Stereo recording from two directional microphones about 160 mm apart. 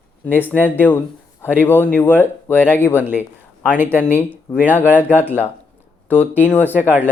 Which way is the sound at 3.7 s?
10° right (ahead or behind).